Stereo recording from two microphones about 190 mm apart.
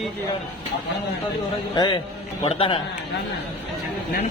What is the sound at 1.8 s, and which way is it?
A man's voice, 25° left (ahead or behind).